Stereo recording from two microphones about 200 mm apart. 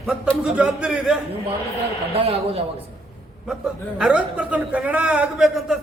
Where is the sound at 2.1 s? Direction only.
30° right (ahead or behind).